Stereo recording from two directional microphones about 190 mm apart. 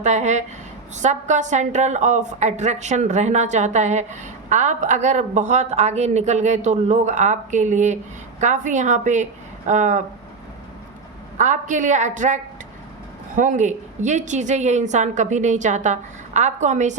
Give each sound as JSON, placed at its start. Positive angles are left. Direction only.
{"t": 0.0, "sound": "a woman's voice", "side_deg": -35}
{"t": 11.3, "sound": "a woman's voice", "side_deg": -40}